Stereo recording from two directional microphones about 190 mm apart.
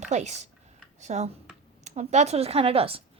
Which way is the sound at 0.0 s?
35° right (ahead or behind).